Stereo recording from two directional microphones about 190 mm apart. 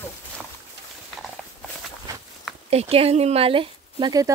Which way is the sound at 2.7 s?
30° right (ahead or behind).